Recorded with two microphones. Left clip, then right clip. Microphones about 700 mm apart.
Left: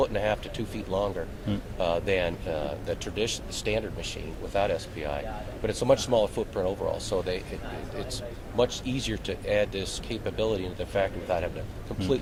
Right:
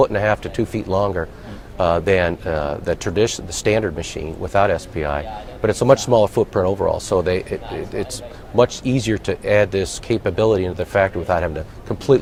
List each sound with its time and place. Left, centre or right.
0.0 s speech: right
8.5 s speech: right